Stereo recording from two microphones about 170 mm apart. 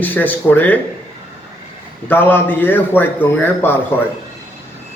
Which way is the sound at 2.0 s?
10° left (ahead or behind).